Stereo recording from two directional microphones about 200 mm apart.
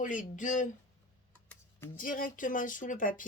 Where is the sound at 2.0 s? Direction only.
45° left (ahead or behind).